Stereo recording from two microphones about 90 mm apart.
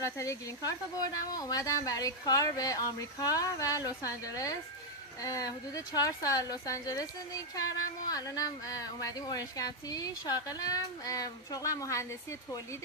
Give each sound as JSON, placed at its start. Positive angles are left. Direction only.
{"t": 0.0, "sound": "speech", "side_deg": 35}